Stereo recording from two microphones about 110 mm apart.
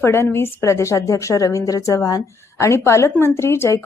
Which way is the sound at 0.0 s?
20° left (ahead or behind).